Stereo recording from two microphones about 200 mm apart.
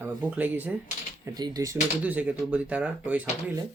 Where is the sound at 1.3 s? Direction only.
20° right (ahead or behind).